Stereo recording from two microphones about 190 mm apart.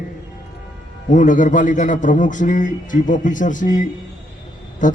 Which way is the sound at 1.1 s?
40° left (ahead or behind).